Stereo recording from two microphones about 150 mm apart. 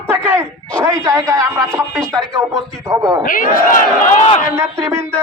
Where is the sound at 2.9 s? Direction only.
25° right (ahead or behind).